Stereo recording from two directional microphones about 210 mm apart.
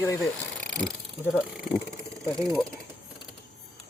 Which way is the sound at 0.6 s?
Centre (ahead or behind).